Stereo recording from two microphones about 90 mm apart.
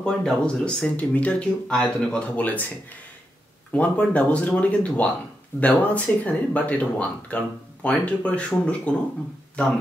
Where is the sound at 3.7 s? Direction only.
15° left (ahead or behind).